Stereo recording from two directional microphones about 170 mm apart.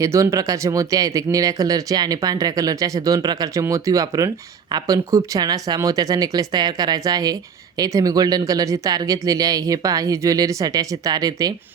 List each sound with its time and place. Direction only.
0.0 s speech: 20° right (ahead or behind)